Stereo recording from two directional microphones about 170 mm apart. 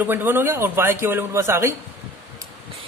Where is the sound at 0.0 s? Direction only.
10° right (ahead or behind).